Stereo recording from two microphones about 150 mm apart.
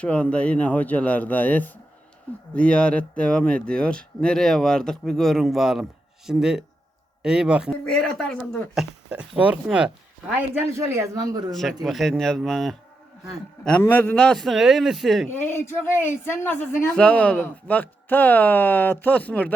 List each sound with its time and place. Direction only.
0.0 s speech: 10° left (ahead or behind)
7.9 s speech: 5° left (ahead or behind)
10.8 s speech: 20° right (ahead or behind)
11.5 s speech: centre (ahead or behind)
15.3 s speech: 15° left (ahead or behind)